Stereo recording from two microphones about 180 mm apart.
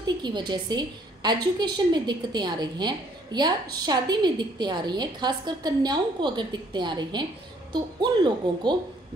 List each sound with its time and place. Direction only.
0.0 s a woman's voice: 25° right (ahead or behind)